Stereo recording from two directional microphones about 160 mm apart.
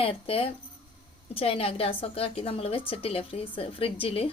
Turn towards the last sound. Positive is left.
turn(degrees=35)  # may be behind; listen again after turning